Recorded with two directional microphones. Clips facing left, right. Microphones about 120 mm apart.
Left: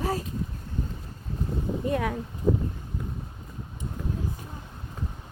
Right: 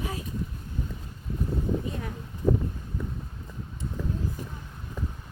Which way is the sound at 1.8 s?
80° left.